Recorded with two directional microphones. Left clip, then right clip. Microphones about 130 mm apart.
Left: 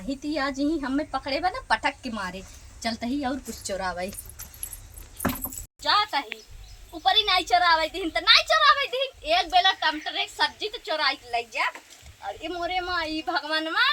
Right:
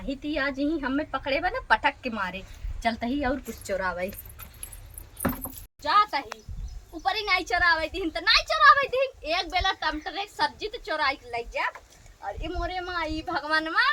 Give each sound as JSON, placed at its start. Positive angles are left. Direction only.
{"t": 0.1, "sound": "a woman's voice", "side_deg": 10}
{"t": 3.6, "sound": "speech", "side_deg": -10}
{"t": 5.4, "sound": "a sound", "side_deg": -25}
{"t": 6.9, "sound": "a woman's voice", "side_deg": -15}
{"t": 13.4, "sound": "a woman's voice", "side_deg": 5}